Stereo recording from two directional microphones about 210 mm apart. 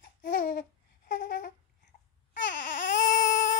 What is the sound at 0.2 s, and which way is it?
Babbling, 40° left (ahead or behind).